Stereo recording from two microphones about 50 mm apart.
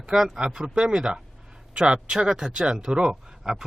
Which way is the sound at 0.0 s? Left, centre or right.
Centre.